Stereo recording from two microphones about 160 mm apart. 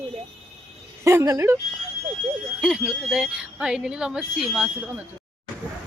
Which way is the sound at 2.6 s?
5° right (ahead or behind).